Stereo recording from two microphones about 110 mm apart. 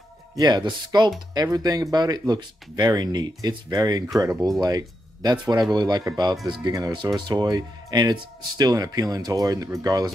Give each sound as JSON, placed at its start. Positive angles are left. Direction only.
{"t": 0.4, "sound": "speech", "side_deg": -40}